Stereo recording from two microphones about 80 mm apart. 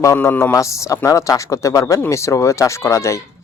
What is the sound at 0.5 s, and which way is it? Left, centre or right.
Speech, left.